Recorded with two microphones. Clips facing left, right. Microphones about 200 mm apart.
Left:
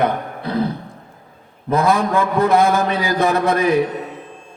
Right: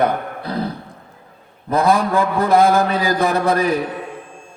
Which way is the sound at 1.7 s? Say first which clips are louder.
Even; 35° right (ahead or behind).